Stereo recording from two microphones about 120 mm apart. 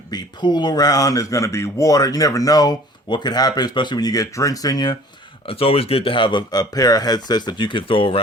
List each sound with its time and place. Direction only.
0.1 s speech: 35° left (ahead or behind)
5.5 s speech: 55° left (ahead or behind)